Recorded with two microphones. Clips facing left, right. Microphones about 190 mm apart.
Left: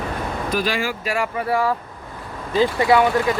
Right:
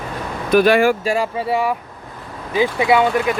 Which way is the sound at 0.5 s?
55° right (ahead or behind).